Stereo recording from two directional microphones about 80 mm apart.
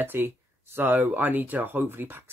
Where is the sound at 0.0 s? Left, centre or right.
Right.